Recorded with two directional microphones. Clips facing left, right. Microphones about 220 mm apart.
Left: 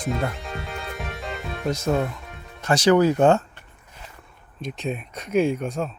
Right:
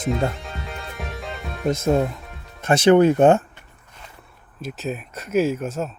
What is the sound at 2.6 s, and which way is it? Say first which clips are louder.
Speech: right 3 dB; 25° right (ahead or behind).